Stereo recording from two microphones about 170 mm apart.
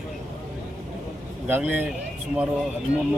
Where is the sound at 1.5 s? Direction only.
10° right (ahead or behind).